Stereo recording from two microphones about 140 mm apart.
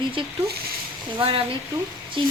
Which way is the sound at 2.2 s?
35° right (ahead or behind).